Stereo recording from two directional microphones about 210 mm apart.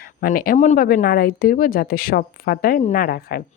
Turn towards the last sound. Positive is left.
turn(degrees=45)  # may be behind; listen again after turning